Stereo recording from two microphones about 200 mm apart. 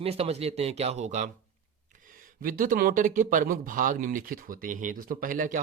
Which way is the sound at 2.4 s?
45° right (ahead or behind).